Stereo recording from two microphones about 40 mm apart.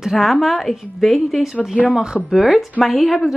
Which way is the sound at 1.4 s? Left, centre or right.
Centre.